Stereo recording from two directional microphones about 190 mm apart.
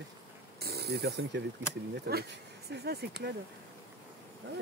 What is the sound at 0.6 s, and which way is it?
Speech, 55° right (ahead or behind).